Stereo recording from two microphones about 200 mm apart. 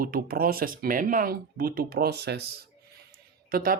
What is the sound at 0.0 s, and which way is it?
Speech, 45° right (ahead or behind).